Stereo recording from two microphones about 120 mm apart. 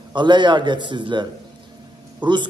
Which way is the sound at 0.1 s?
40° right (ahead or behind).